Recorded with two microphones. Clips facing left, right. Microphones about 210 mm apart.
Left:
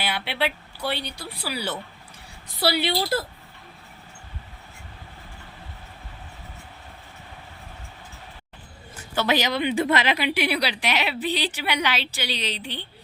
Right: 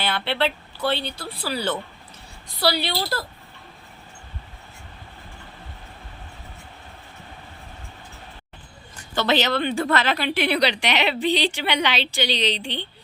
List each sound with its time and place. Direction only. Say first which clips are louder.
0.0 s speech: right 3 dB; 10° left (ahead or behind)
2.7 s a woman's voice: left 2 dB; 20° left (ahead or behind)
9.0 s speech: right 2 dB; 10° left (ahead or behind)